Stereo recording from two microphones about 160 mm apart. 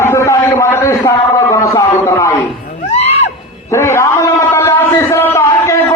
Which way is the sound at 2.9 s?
40° left (ahead or behind).